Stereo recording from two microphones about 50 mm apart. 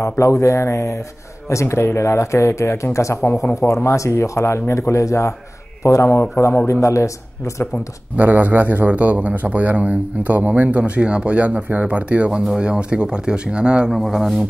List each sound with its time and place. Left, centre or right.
0.2 s speech: left
1.5 s speech: left
2.0 s speech: left
6.3 s a man's voice: left
6.7 s speech: left
8.2 s a man's voice: right
13.9 s speech: centre